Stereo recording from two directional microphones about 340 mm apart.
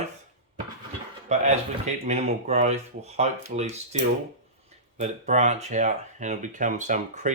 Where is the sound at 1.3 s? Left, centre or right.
Centre.